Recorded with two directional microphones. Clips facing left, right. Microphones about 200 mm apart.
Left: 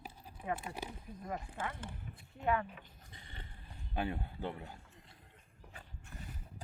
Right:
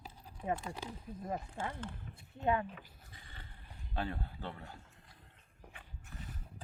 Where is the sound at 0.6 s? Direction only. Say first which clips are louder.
Even; 10° left (ahead or behind).